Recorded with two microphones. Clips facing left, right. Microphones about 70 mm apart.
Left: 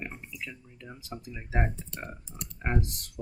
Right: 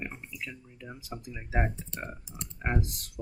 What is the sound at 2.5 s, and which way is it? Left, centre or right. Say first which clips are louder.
Speech: even; centre.